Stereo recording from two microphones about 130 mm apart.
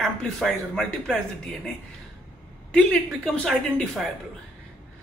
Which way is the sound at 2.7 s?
5° left (ahead or behind).